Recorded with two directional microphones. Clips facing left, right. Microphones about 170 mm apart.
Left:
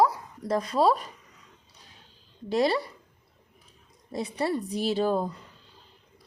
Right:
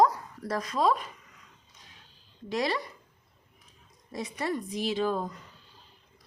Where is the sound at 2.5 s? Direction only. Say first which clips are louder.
Left 5 dB; 30° left (ahead or behind).